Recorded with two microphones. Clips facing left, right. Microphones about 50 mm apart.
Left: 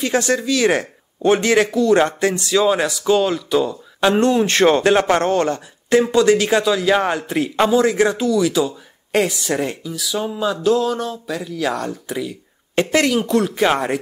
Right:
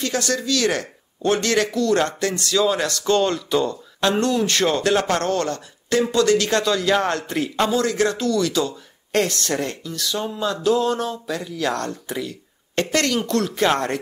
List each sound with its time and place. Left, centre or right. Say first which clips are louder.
0.0 s a man's voice: left 5 dB; left; by 3.8 s centre
4.0 s a man's voice: left 4 dB; left